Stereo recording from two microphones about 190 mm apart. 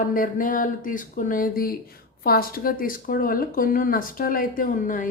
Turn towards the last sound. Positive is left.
turn(degrees=45)  # may be behind; listen again after turning